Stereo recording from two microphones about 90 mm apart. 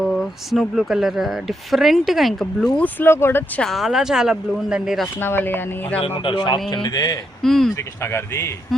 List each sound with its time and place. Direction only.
0.0 s speech: centre (ahead or behind)
2.7 s speech: 20° left (ahead or behind)
3.6 s speech: centre (ahead or behind)
5.1 s speech: 25° left (ahead or behind)
6.1 s a man's voice: 60° left (ahead or behind); by 7.2 s 45° left (ahead or behind)
7.4 s speech: 5° left (ahead or behind)
7.8 s a man's voice: 30° left (ahead or behind)